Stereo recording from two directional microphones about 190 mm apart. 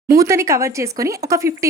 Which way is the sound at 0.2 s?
15° right (ahead or behind).